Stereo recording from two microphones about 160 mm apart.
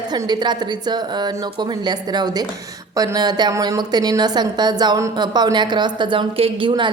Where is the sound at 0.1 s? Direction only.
25° right (ahead or behind).